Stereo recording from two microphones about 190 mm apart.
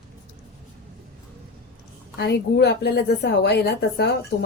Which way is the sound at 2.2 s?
60° left (ahead or behind).